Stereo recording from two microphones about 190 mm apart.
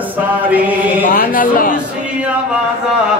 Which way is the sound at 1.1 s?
45° left (ahead or behind).